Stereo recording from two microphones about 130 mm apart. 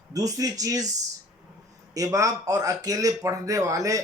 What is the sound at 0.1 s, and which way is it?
A man's voice, 30° right (ahead or behind).